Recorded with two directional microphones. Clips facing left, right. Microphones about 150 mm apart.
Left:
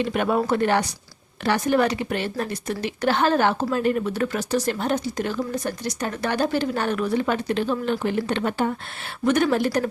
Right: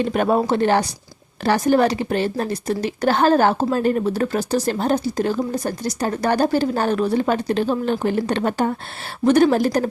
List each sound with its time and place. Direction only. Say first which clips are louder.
0.0 s a woman's voice: right 4 dB; 40° right (ahead or behind)